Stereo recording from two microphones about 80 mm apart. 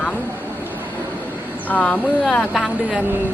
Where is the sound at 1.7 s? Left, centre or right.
Centre.